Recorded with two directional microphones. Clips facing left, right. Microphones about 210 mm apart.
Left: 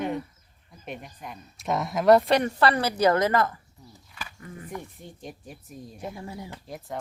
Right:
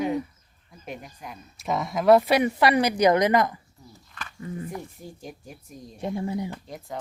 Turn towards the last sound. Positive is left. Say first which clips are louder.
# even
turn(degrees=0)  # may be behind; listen again after turning